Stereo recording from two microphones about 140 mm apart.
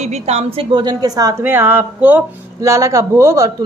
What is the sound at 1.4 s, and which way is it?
Speech, 15° right (ahead or behind).